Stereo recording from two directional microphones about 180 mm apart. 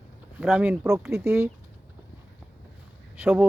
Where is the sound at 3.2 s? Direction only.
5° right (ahead or behind).